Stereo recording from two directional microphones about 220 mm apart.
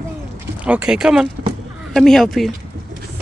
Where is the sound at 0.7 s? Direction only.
5° right (ahead or behind).